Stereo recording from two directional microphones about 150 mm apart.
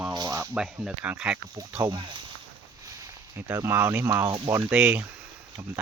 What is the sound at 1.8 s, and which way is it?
Speech, 30° right (ahead or behind).